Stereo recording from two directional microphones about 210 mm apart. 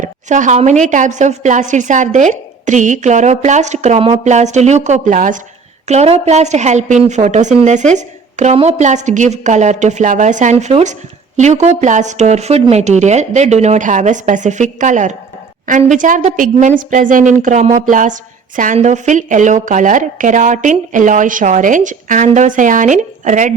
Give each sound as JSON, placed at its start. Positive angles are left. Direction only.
{"t": 0.0, "sound": "a woman's voice", "side_deg": -35}